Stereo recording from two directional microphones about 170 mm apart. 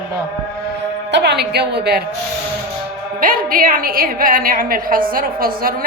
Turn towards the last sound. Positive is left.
turn(degrees=-60)  # may be behind; listen again after turning